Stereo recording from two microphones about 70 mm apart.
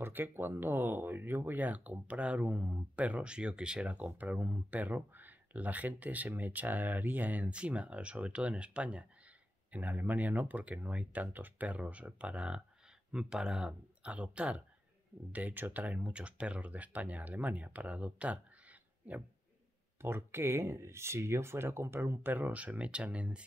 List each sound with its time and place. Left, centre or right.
0.0 s speech: right
20.0 s speech: right; by 23.4 s centre